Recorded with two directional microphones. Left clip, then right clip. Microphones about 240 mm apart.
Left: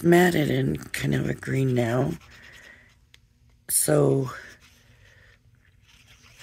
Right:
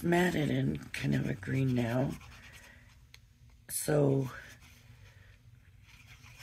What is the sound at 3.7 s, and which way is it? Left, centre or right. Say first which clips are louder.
Speech: left 8 dB; left.